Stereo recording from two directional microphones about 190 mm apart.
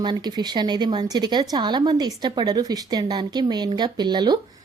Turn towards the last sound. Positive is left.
turn(degrees=-20)  # may be behind; listen again after turning